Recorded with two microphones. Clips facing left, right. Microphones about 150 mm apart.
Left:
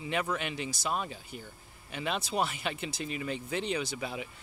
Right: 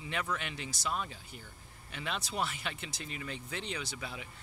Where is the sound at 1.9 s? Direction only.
15° left (ahead or behind).